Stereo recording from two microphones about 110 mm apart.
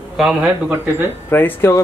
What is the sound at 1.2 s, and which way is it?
Speech, 20° left (ahead or behind).